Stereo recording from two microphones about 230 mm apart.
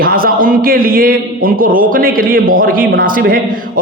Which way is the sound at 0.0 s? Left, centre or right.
Right.